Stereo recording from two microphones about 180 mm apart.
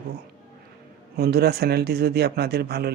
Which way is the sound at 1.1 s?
60° right (ahead or behind).